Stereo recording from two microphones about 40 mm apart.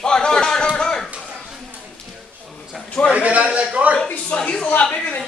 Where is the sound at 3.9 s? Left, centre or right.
Left.